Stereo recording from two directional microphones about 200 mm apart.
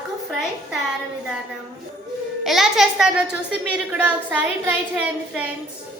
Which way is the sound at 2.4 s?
Centre (ahead or behind).